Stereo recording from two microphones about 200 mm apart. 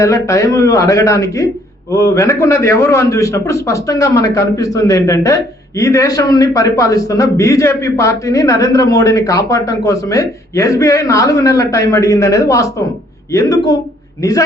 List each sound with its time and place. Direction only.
0.0 s a man's voice: 15° left (ahead or behind)